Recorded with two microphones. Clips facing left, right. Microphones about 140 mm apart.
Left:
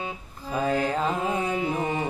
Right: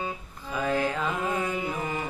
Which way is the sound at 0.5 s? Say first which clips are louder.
Left 2 dB; 35° left (ahead or behind).